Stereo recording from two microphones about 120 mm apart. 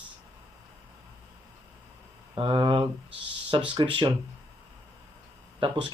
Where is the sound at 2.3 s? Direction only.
45° right (ahead or behind).